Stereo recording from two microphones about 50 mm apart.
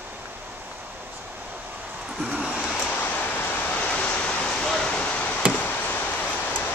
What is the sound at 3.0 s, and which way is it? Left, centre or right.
Vehicle, left.